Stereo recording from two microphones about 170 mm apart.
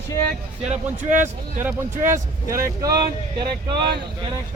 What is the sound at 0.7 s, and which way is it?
Speech, 45° right (ahead or behind).